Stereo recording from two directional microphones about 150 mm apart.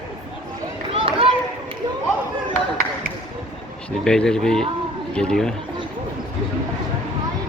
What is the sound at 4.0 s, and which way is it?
Speech, 5° left (ahead or behind).